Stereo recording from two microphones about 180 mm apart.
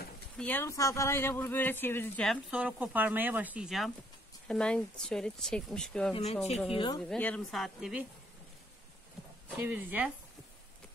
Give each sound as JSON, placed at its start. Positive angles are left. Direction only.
{"t": 0.4, "sound": "speech", "side_deg": 10}
{"t": 2.2, "sound": "speech", "side_deg": -5}
{"t": 6.7, "sound": "speech", "side_deg": 25}
{"t": 7.0, "sound": "speech", "side_deg": 5}
{"t": 9.6, "sound": "speech", "side_deg": -10}